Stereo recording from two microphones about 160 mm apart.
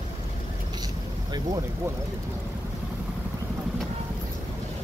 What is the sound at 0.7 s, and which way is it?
Vehicle, 25° right (ahead or behind).